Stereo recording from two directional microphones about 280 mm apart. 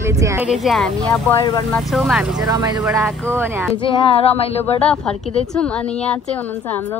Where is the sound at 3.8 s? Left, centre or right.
Centre.